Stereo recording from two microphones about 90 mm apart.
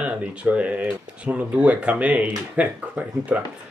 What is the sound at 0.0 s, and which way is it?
Speech, 15° right (ahead or behind).